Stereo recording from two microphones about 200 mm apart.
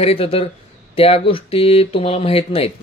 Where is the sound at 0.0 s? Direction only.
30° left (ahead or behind).